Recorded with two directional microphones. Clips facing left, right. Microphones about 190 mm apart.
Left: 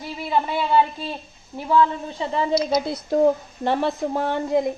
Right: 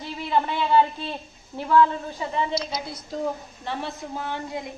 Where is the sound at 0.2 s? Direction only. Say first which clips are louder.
Left 1 dB; 10° left (ahead or behind).